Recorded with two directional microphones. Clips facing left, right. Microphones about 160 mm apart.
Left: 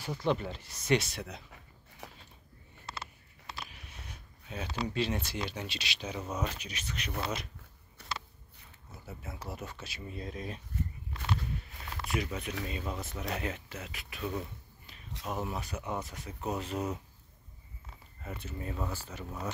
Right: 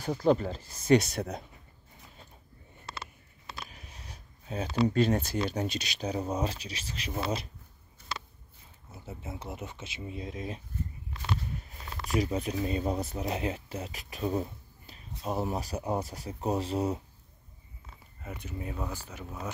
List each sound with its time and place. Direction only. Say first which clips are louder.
0.0 s speech: right 6 dB; 40° right (ahead or behind)
2.0 s a sound: left 9 dB; 75° left (ahead or behind)
3.7 s speech: right 1 dB; 35° right (ahead or behind)
8.0 s a sound: right 1 dB; 70° left (ahead or behind)
9.0 s speech: right 3 dB; 25° right (ahead or behind)
12.1 s speech: right 6 dB; 35° right (ahead or behind)
18.2 s speech: right 1 dB; 15° right (ahead or behind)